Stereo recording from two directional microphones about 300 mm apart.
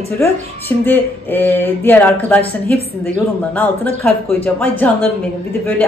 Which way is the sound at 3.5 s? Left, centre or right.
Centre.